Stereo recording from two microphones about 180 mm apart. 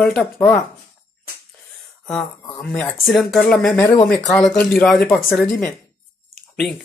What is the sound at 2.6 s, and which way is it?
Speech, 5° left (ahead or behind).